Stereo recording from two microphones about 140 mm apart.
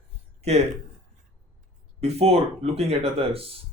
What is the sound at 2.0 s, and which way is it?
Speech, 50° right (ahead or behind).